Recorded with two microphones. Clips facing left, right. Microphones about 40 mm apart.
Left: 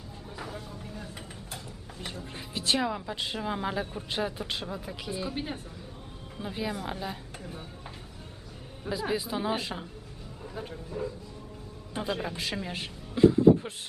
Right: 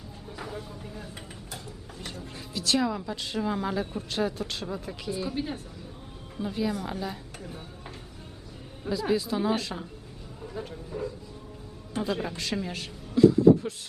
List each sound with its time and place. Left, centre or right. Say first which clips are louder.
0.3 s speech: right 2 dB; centre
2.0 s a woman's voice: left 1 dB; centre
4.6 s speech: right 3 dB; centre
5.1 s a woman's voice: right 2 dB; centre
9.1 s a woman's voice: right 4 dB; centre
10.4 s a sound: right 2 dB; centre
11.0 s speech: even; centre
12.1 s a woman's voice: right 2 dB; centre
12.7 s speech: right 5 dB; left